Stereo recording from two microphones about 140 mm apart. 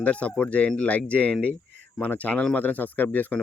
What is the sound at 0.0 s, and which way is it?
Speech, 10° left (ahead or behind).